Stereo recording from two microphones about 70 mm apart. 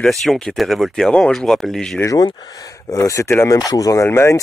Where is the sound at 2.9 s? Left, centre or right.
Left.